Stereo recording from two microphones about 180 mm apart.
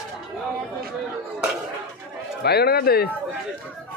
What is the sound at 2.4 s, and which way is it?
Speech, 60° left (ahead or behind).